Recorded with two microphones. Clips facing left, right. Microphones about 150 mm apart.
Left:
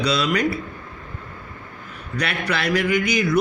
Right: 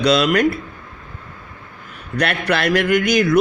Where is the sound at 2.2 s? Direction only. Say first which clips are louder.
Right 5 dB; 85° right.